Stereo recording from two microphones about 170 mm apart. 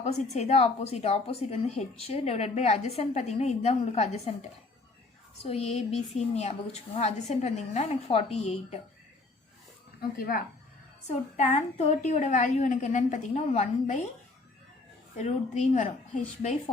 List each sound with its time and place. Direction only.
0.0 s a woman's voice: 40° left (ahead or behind)
5.5 s a woman's voice: 40° left (ahead or behind)
10.0 s speech: 60° left (ahead or behind)
11.3 s a woman's voice: 40° left (ahead or behind)
15.2 s a woman's voice: 45° left (ahead or behind)